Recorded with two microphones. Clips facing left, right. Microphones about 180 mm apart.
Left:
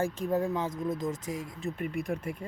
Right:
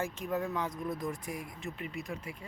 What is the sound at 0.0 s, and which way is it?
Speech, 30° left (ahead or behind).